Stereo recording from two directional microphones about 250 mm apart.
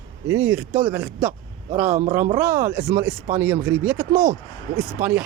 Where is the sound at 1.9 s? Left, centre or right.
Right.